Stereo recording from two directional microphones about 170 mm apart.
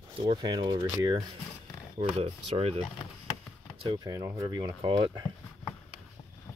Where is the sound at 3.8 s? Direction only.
25° right (ahead or behind).